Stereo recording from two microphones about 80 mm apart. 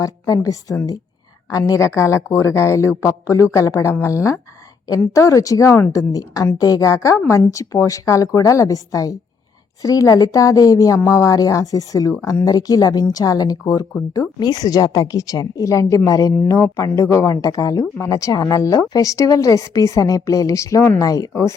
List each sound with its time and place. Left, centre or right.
0.0 s a woman's voice: left